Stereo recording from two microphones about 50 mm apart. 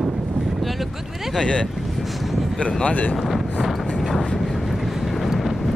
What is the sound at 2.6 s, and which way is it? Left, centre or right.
Speech, left.